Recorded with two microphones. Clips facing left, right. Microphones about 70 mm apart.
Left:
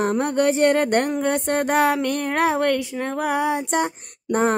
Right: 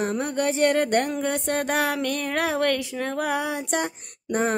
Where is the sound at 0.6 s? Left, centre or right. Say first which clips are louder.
Even; left.